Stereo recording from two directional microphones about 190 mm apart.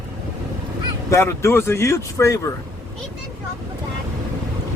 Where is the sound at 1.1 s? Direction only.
15° left (ahead or behind).